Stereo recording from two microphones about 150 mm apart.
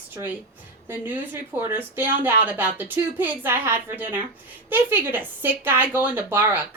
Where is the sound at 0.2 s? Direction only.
25° right (ahead or behind).